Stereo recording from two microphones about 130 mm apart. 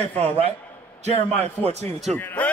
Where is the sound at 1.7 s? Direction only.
60° right (ahead or behind).